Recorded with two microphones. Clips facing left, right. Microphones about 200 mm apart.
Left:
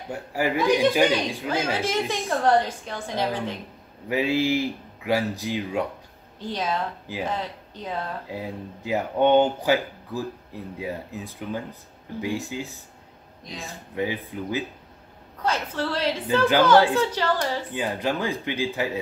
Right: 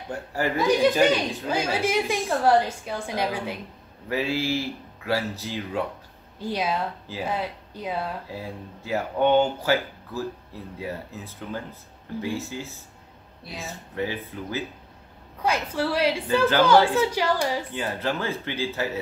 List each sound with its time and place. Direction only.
0.1 s speech: 10° left (ahead or behind)
1.5 s a woman's voice: 10° right (ahead or behind)
4.1 s speech: 15° left (ahead or behind)
6.4 s a woman's voice: 10° right (ahead or behind)
8.3 s speech: 15° left (ahead or behind)
13.4 s speech: 5° right (ahead or behind)
13.9 s speech: 15° left (ahead or behind)
15.4 s a woman's voice: 10° right (ahead or behind)
17.7 s speech: 15° left (ahead or behind)